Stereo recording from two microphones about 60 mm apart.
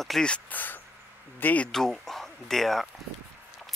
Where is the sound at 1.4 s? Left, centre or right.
Left.